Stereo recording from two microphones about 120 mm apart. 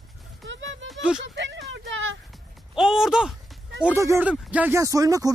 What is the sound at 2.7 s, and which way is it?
Speech, 5° right (ahead or behind).